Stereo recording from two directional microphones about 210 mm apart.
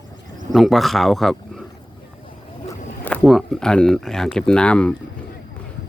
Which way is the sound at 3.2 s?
Centre (ahead or behind).